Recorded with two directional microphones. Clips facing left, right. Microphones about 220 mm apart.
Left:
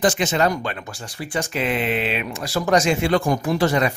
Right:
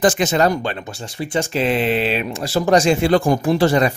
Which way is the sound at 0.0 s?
40° right (ahead or behind).